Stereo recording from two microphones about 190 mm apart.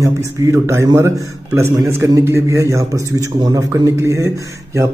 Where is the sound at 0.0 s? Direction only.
15° right (ahead or behind).